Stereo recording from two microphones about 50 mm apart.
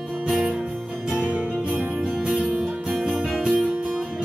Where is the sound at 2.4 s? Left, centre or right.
Centre.